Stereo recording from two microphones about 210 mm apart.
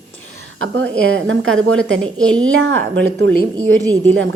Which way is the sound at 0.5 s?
65° right (ahead or behind).